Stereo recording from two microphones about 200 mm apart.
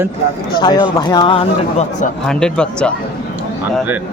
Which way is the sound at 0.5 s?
20° left (ahead or behind).